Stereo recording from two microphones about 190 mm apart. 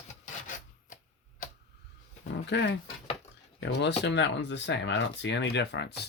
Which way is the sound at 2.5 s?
65° left (ahead or behind).